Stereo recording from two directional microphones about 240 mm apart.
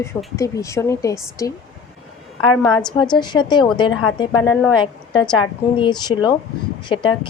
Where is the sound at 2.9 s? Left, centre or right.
Centre.